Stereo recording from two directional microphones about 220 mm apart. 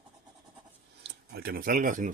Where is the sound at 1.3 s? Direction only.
45° right (ahead or behind).